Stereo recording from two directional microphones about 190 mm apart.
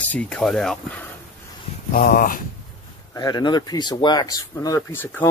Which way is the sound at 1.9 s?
50° left (ahead or behind).